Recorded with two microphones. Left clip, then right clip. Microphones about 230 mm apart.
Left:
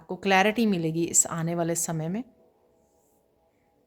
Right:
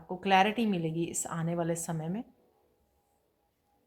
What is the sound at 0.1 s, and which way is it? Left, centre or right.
A woman's voice, left.